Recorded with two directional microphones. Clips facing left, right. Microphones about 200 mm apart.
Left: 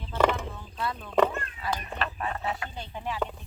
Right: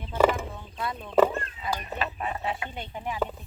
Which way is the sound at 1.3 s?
25° right (ahead or behind).